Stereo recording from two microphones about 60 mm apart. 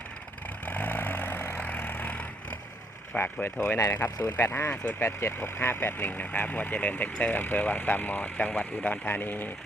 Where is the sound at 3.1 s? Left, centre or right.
Left.